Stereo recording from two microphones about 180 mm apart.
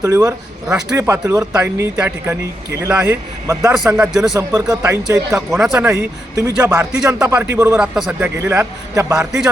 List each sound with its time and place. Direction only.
0.0 s speech: 15° right (ahead or behind)
0.7 s a man's voice: 5° right (ahead or behind)
0.9 s speech: 15° right (ahead or behind)
3.7 s a man's voice: 5° right (ahead or behind)
4.4 s speech: 20° right (ahead or behind)
5.5 s a man's voice: centre (ahead or behind)
5.9 s speech: 15° right (ahead or behind)
7.8 s a man's voice: 5° right (ahead or behind)
8.4 s speech: 15° right (ahead or behind)
9.1 s a man's voice: 5° right (ahead or behind)